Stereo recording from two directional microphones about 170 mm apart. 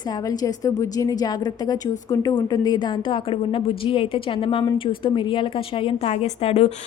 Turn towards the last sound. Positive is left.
turn(degrees=35)  # may be behind; listen again after turning